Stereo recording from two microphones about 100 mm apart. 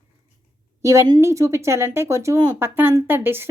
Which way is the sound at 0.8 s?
30° right (ahead or behind).